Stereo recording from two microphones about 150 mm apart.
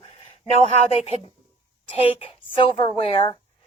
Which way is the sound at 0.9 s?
40° left (ahead or behind).